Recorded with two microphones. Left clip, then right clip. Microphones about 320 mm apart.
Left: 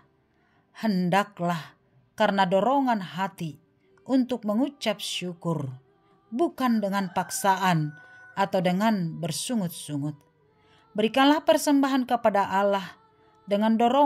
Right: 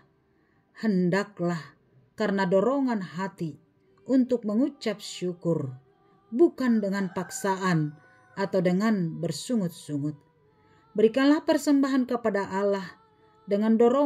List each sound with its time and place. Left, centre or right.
0.7 s speech: left